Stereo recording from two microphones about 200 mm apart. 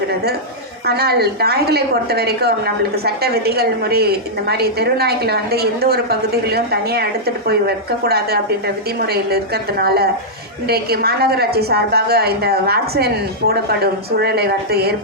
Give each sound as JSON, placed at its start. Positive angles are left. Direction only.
{"t": 0.9, "sound": "a woman's voice", "side_deg": -55}